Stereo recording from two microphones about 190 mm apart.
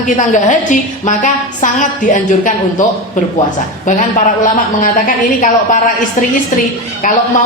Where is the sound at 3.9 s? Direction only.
40° left (ahead or behind).